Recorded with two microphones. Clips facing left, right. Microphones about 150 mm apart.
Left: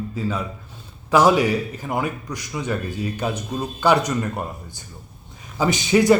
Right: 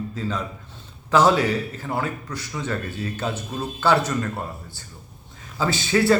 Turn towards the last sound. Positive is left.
turn(degrees=15)  # may be behind; listen again after turning